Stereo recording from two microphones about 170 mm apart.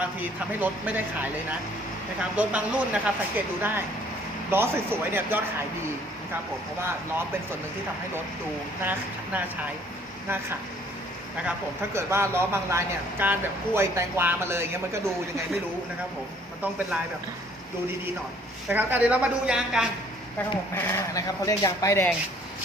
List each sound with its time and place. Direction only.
0.0 s speech: 10° right (ahead or behind)
8.8 s speech: 10° right (ahead or behind)
11.9 s speech: 15° right (ahead or behind)
18.7 s speech: 10° right (ahead or behind)
20.7 s speech: 15° left (ahead or behind)